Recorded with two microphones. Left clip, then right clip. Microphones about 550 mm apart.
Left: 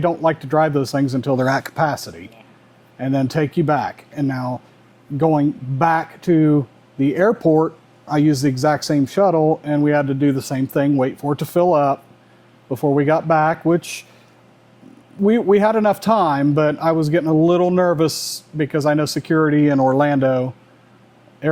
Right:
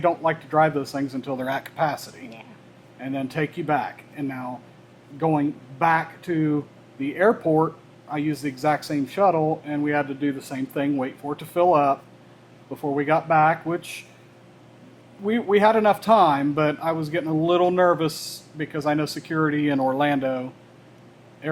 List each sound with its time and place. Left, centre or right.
0.0 s a man's voice: left
3.0 s a man's voice: left
15.3 s a man's voice: left